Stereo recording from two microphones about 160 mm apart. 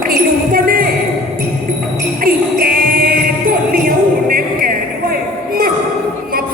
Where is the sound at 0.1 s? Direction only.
65° right (ahead or behind).